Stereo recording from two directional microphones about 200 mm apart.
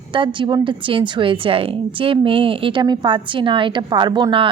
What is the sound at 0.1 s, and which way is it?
A woman's voice, 25° right (ahead or behind).